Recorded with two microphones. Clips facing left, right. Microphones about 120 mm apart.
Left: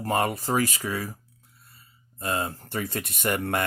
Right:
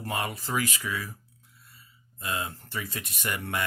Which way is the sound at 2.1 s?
45° left (ahead or behind).